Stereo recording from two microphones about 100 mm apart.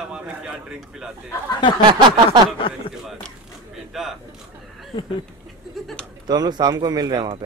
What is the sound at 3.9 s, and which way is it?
Speech, 5° right (ahead or behind).